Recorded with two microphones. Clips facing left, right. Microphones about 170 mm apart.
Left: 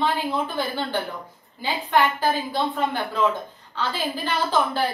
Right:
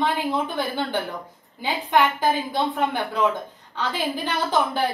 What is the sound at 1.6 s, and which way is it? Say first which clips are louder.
A woman's voice: right 1 dB; 20° right (ahead or behind).